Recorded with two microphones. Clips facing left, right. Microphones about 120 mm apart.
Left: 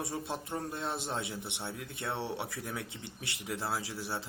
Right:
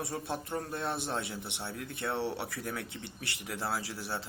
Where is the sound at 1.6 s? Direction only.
20° left (ahead or behind).